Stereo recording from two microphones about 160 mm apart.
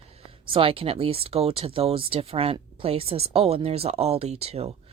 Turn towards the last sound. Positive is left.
turn(degrees=-40)  # may be behind; listen again after turning